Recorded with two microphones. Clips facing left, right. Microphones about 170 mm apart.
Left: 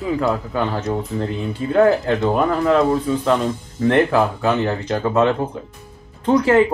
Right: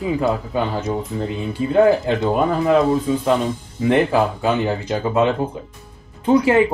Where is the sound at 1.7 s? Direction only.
15° right (ahead or behind).